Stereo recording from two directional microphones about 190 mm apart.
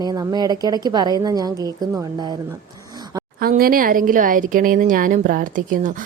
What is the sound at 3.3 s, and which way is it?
Speech, 50° right (ahead or behind).